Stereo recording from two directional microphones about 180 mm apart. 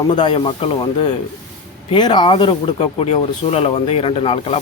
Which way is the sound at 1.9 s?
25° left (ahead or behind).